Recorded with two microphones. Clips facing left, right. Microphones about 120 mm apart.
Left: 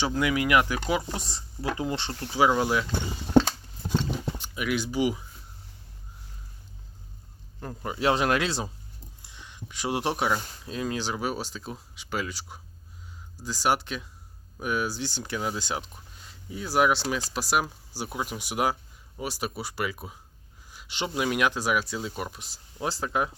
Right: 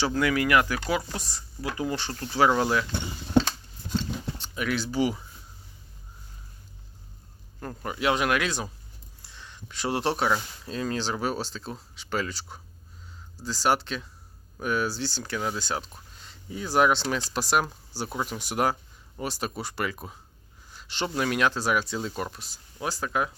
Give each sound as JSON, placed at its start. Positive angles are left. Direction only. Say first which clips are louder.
{"t": 0.0, "sound": "speech", "louder": "right 1 dB", "side_deg": 20}
{"t": 2.3, "sound": "speech", "louder": "right 1 dB", "side_deg": 10}
{"t": 4.4, "sound": "speech", "louder": "right 2 dB", "side_deg": 10}
{"t": 7.6, "sound": "speech", "louder": "right 1 dB", "side_deg": 10}
{"t": 7.9, "sound": "speech", "louder": "left 1 dB", "side_deg": 30}
{"t": 9.2, "sound": "speech", "louder": "left 1 dB", "side_deg": 15}
{"t": 16.2, "sound": "speech", "louder": "right 1 dB", "side_deg": 5}
{"t": 22.4, "sound": "speech", "louder": "left 2 dB", "side_deg": 25}